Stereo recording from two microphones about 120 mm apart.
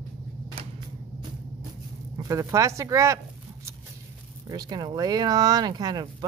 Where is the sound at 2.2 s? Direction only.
30° right (ahead or behind).